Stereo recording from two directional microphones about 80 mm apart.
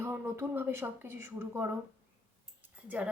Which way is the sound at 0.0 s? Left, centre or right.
Right.